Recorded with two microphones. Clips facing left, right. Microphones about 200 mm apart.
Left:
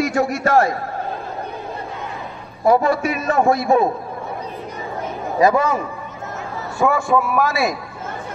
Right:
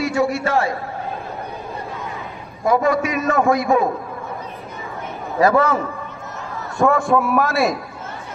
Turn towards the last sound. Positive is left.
turn(degrees=0)  # may be behind; listen again after turning